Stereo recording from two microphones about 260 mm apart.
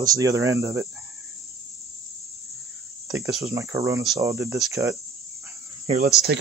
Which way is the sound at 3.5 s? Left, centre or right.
Centre.